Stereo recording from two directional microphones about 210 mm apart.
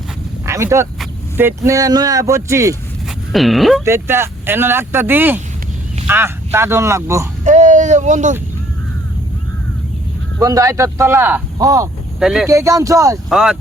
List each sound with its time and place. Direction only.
0.4 s speech: 15° right (ahead or behind)
3.3 s speech: centre (ahead or behind)
3.8 s speech: 10° right (ahead or behind)
7.4 s speech: 35° right (ahead or behind)
10.4 s speech: 15° right (ahead or behind)
12.2 s speech: centre (ahead or behind)
12.5 s speech: 15° right (ahead or behind)
13.3 s speech: 5° right (ahead or behind)